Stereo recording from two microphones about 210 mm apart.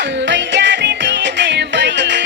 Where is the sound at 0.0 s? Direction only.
55° right (ahead or behind).